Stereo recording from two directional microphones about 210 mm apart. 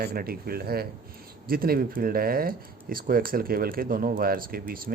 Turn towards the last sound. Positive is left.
turn(degrees=-45)  # may be behind; listen again after turning